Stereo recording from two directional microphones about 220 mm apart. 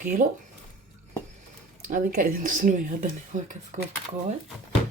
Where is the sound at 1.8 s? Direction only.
35° right (ahead or behind).